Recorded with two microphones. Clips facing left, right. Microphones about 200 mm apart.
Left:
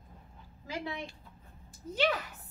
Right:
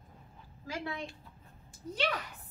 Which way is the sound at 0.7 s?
20° left (ahead or behind).